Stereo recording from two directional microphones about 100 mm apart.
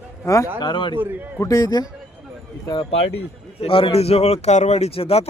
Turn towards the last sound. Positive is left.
turn(degrees=85)